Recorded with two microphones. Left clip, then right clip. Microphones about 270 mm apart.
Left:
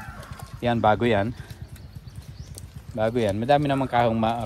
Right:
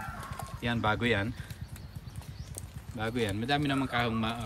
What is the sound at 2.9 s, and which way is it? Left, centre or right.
A man's voice, centre.